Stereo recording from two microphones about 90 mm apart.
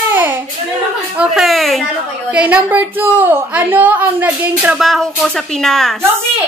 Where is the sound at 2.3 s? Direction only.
15° right (ahead or behind).